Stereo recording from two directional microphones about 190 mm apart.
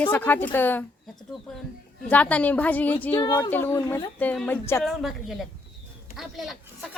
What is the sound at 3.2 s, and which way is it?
A woman's voice, 20° left (ahead or behind).